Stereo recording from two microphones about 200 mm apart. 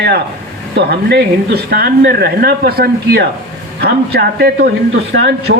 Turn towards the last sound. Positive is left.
turn(degrees=-55)  # may be behind; listen again after turning